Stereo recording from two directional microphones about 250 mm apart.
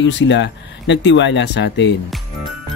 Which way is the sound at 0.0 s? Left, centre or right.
Left.